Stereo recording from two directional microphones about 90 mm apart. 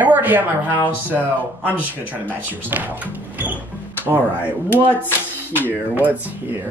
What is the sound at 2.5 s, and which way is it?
Speech, 20° right (ahead or behind).